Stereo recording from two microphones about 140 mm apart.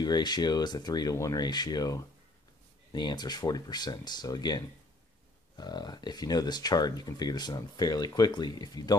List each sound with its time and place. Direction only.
0.0 s speech: 30° left (ahead or behind)